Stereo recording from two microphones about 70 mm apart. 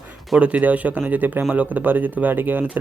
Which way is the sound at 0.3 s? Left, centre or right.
Centre.